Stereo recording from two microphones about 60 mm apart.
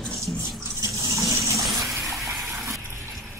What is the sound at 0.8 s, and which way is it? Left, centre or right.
Water, right.